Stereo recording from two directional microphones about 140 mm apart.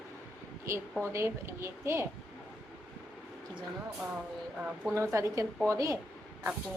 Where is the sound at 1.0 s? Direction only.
20° right (ahead or behind).